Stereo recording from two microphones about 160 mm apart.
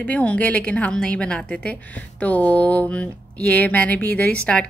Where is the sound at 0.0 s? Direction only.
10° left (ahead or behind).